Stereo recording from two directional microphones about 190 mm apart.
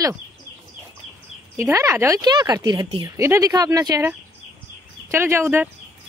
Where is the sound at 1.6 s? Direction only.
15° right (ahead or behind).